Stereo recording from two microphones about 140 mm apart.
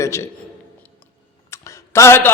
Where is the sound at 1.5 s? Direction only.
20° left (ahead or behind).